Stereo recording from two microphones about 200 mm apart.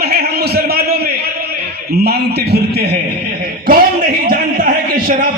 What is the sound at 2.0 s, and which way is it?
Speech, 50° right (ahead or behind).